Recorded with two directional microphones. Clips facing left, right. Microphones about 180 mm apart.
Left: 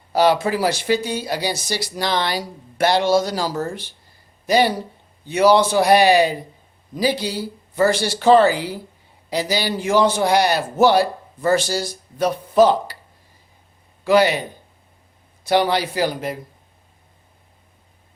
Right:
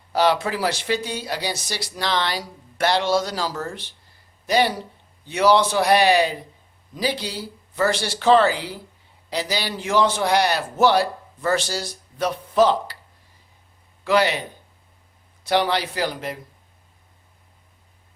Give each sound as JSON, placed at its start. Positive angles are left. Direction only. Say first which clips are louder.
{"t": 0.1, "sound": "a man's voice", "louder": "left 3 dB", "side_deg": 5}
{"t": 4.4, "sound": "speech", "louder": "left 3 dB", "side_deg": 5}
{"t": 7.9, "sound": "a man's voice", "louder": "left 3 dB", "side_deg": 45}
{"t": 8.2, "sound": "a man's voice", "louder": "left 3 dB", "side_deg": 5}
{"t": 12.1, "sound": "a man's voice", "louder": "left 4 dB", "side_deg": 5}
{"t": 14.0, "sound": "a man's voice", "louder": "left 4 dB", "side_deg": 5}